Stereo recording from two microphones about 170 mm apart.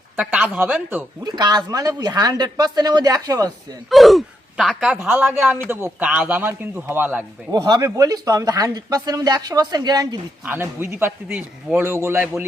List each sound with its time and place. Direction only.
0.2 s a man's voice: 10° right (ahead or behind)
1.2 s speech: 25° right (ahead or behind)
3.8 s a man's voice: centre (ahead or behind)
7.5 s speech: 25° right (ahead or behind)
10.4 s a man's voice: 10° right (ahead or behind)